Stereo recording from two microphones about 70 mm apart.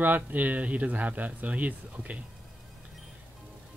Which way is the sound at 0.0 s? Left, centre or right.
Right.